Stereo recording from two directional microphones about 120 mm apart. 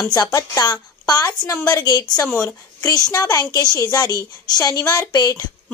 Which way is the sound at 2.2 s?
20° left (ahead or behind).